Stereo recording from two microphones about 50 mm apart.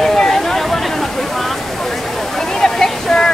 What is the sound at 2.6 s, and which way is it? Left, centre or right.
Waterfall, centre.